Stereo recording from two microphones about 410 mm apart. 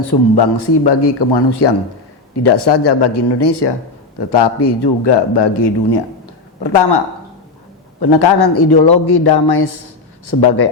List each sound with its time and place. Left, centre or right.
0.0 s a man's voice: left
8.0 s a man's voice: left